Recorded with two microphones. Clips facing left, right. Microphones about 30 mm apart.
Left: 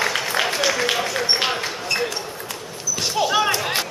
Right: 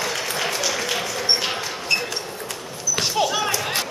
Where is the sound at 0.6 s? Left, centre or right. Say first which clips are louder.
Left 4 dB; left.